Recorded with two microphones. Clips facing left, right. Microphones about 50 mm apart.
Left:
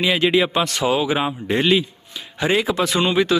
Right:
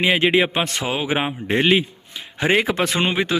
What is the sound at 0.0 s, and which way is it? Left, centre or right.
A man's voice, right.